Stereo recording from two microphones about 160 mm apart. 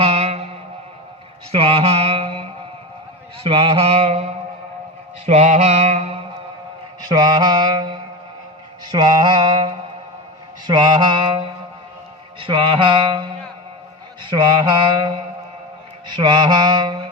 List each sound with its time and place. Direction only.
0.0 s music: 40° right (ahead or behind)
1.5 s music: 35° right (ahead or behind)
3.4 s mantra: 35° right (ahead or behind)
7.1 s mantra: 25° right (ahead or behind)